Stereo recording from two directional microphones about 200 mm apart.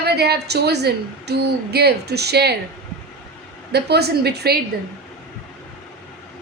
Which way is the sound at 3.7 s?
55° right (ahead or behind).